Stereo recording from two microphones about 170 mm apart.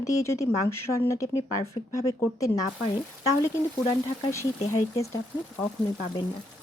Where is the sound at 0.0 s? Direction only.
20° left (ahead or behind).